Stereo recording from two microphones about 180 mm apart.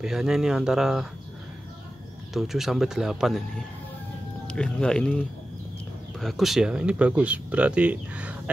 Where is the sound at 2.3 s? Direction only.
Centre (ahead or behind).